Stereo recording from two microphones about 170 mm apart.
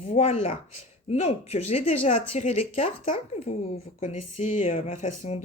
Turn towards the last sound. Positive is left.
turn(degrees=45)  # may be behind; listen again after turning